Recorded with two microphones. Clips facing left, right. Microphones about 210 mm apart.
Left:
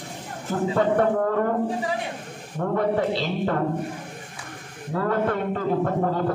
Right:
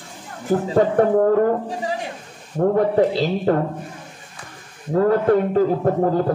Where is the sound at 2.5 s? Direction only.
40° right (ahead or behind).